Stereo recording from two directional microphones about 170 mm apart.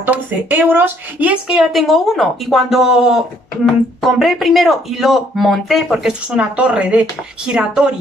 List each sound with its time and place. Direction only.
0.0 s speech: 10° right (ahead or behind)
4.2 s speech: centre (ahead or behind)